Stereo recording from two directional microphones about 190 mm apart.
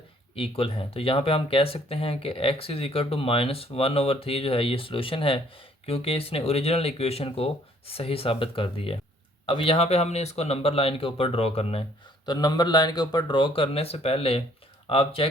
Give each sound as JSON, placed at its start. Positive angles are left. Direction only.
{"t": 0.3, "sound": "speech", "side_deg": 30}